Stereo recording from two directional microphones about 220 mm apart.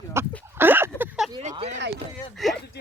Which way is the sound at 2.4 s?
Centre (ahead or behind).